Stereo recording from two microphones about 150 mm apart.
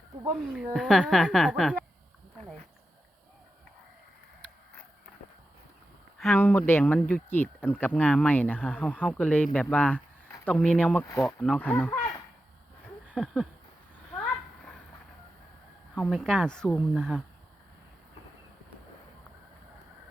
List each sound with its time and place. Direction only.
0.3 s speech: centre (ahead or behind)
6.1 s speech: 5° left (ahead or behind)
6.4 s speech: 15° left (ahead or behind)
11.0 s speech: 20° left (ahead or behind)
11.3 s speech: 5° left (ahead or behind)
13.1 s a sound: centre (ahead or behind)
16.0 s speech: centre (ahead or behind)